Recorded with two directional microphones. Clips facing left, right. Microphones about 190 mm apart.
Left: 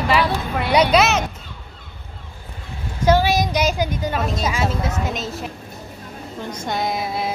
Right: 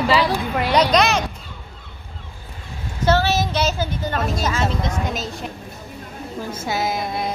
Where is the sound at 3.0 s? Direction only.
10° left (ahead or behind).